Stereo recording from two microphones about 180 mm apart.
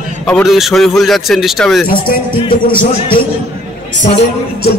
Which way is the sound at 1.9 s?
55° left (ahead or behind).